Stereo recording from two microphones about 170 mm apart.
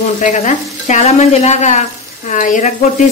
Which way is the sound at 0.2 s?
45° left (ahead or behind).